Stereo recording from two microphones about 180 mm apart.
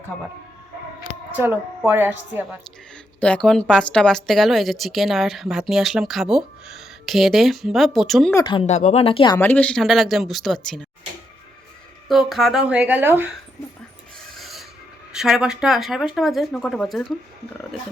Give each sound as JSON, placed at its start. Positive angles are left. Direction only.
{"t": 1.4, "sound": "a woman's voice", "side_deg": -10}
{"t": 3.2, "sound": "speech", "side_deg": 5}
{"t": 8.3, "sound": "speech", "side_deg": 20}
{"t": 8.6, "sound": "speech", "side_deg": 40}
{"t": 9.4, "sound": "speech", "side_deg": 10}
{"t": 12.0, "sound": "a woman's voice", "side_deg": 0}
{"t": 14.3, "sound": "rub", "side_deg": 0}
{"t": 15.1, "sound": "speech", "side_deg": -5}